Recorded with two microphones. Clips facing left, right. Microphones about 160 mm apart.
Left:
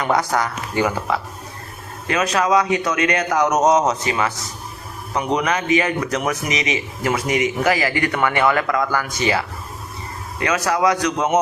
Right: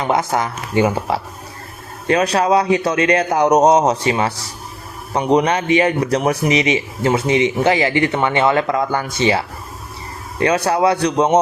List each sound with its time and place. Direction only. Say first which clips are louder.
0.0 s a man's voice: right 1 dB; 25° right (ahead or behind)
10.4 s speech: right 3 dB; 30° right (ahead or behind)